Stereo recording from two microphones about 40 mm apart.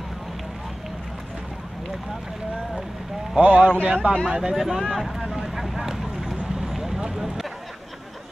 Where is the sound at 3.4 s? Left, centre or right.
Right.